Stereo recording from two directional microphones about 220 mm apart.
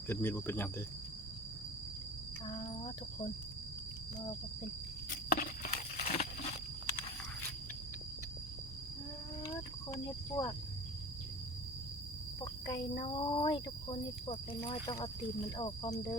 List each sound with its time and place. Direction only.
0.1 s speech: 10° left (ahead or behind)
2.5 s cricket: 25° left (ahead or behind)
5.0 s a sound: 40° left (ahead or behind)
9.4 s cricket: 15° left (ahead or behind)
12.4 s cricket: 20° left (ahead or behind)
12.9 s speech: 25° left (ahead or behind)